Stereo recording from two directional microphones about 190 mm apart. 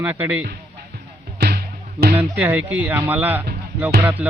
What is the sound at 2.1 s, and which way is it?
Music, 10° right (ahead or behind).